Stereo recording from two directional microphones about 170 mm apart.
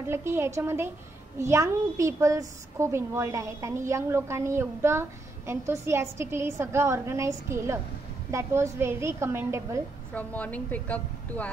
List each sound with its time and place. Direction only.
0.1 s a woman's voice: 15° right (ahead or behind)
10.1 s a woman's voice: 10° left (ahead or behind)